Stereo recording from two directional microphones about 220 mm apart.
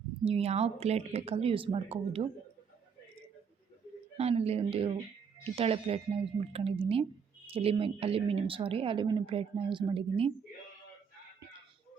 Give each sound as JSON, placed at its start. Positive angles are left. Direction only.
{"t": 0.3, "sound": "a woman's voice", "side_deg": -30}
{"t": 4.2, "sound": "a woman's voice", "side_deg": -30}